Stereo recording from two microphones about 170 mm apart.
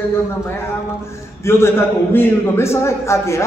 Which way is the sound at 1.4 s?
15° left (ahead or behind).